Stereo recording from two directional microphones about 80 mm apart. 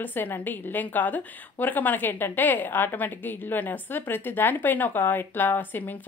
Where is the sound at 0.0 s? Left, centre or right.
Left.